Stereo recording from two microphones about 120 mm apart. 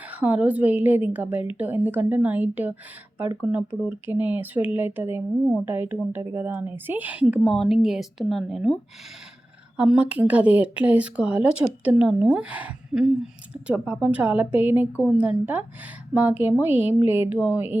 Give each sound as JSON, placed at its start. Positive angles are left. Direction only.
{"t": 0.1, "sound": "speech", "side_deg": -10}
{"t": 7.4, "sound": "speech", "side_deg": 0}